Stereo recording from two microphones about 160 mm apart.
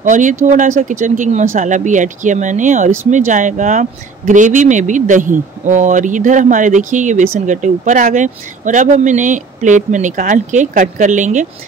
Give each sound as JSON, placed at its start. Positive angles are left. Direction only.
{"t": 0.0, "sound": "speech", "side_deg": -50}